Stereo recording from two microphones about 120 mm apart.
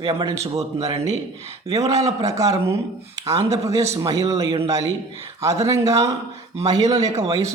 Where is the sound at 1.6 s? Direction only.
30° right (ahead or behind).